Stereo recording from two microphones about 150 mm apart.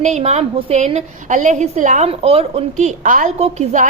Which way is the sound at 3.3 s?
45° right (ahead or behind).